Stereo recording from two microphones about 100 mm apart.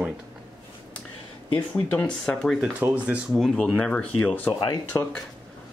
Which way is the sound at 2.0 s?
5° left (ahead or behind).